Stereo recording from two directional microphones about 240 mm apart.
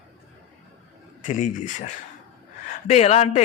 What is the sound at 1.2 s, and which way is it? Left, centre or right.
A man's voice, left.